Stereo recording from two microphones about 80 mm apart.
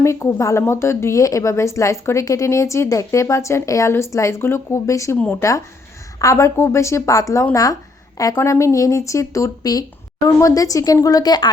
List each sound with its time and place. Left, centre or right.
0.0 s speech: left